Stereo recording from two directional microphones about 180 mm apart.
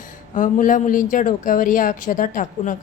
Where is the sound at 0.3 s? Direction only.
45° left (ahead or behind).